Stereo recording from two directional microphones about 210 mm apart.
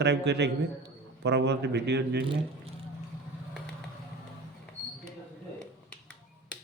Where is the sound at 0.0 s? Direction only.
55° right (ahead or behind).